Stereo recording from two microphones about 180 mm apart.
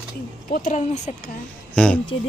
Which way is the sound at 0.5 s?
45° left (ahead or behind).